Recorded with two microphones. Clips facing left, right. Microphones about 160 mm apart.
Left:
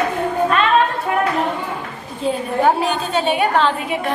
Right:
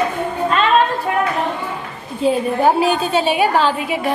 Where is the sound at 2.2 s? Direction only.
5° right (ahead or behind).